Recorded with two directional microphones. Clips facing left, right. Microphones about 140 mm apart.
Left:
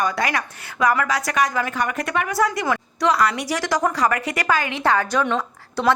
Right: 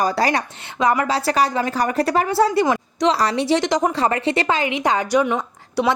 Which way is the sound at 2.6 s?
20° right (ahead or behind).